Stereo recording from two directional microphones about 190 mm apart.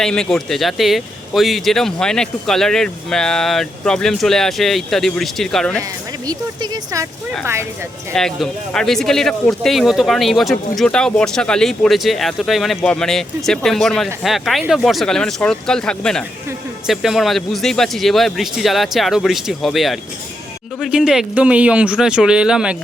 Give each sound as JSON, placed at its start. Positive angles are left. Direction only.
{"t": 0.0, "sound": "speech", "side_deg": 5}
{"t": 6.2, "sound": "speech", "side_deg": -20}
{"t": 8.1, "sound": "speech", "side_deg": 5}